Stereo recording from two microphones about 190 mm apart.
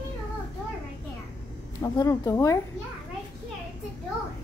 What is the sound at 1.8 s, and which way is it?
Speech, 20° left (ahead or behind).